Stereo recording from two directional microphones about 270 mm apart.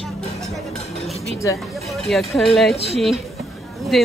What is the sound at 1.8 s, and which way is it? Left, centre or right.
Speech, centre.